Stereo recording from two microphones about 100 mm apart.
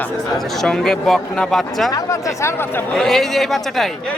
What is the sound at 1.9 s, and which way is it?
Speech, 30° left (ahead or behind).